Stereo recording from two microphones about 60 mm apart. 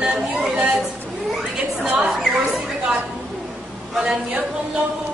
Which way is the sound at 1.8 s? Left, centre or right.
Centre.